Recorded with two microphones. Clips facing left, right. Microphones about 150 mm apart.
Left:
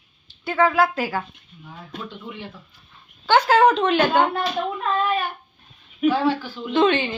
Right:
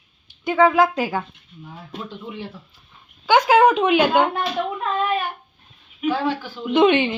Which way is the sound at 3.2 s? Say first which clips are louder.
Right 1 dB; 10° right (ahead or behind).